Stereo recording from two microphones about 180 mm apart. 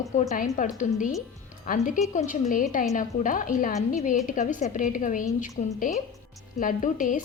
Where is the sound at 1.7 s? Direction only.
45° left (ahead or behind).